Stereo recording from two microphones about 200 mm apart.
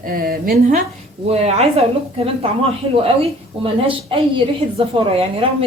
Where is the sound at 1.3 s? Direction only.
30° right (ahead or behind).